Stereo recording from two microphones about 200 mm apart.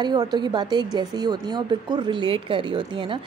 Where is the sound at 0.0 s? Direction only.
20° right (ahead or behind).